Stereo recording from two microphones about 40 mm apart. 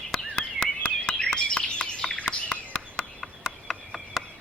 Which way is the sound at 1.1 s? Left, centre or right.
Centre.